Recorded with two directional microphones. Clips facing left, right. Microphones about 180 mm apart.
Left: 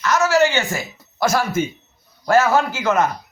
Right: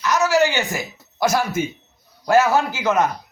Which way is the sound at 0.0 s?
15° right (ahead or behind).